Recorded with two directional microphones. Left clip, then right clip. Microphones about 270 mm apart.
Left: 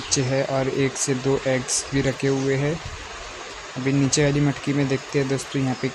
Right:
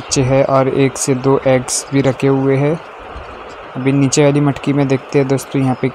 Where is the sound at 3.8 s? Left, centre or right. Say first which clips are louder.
Right 9 dB; centre.